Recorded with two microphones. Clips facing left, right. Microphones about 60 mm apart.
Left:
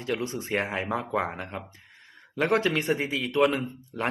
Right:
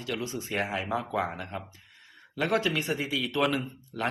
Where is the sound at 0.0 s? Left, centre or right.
Left.